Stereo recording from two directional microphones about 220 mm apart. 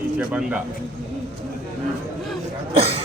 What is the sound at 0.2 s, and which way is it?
Speech, 5° right (ahead or behind).